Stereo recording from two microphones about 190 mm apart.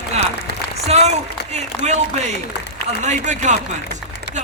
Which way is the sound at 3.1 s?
40° right (ahead or behind).